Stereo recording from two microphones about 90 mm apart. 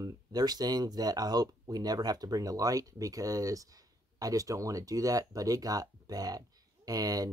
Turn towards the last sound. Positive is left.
turn(degrees=-45)  # may be behind; listen again after turning